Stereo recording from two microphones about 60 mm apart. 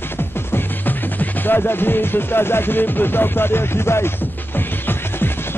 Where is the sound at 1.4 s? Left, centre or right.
Left.